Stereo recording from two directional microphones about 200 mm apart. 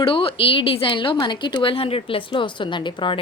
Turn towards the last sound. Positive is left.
turn(degrees=25)  # may be behind; listen again after turning